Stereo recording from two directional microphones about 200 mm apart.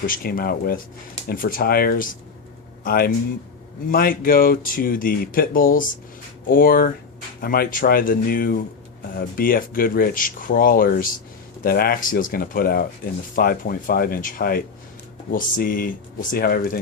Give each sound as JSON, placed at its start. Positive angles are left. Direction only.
{"t": 0.0, "sound": "speech", "side_deg": 45}